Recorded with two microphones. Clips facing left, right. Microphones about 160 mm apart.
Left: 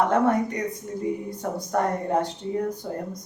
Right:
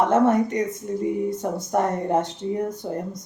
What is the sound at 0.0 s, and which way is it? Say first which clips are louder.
Speech: right 3 dB; 20° right (ahead or behind).